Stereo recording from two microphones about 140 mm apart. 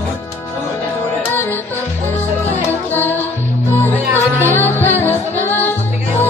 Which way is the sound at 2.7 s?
15° left (ahead or behind).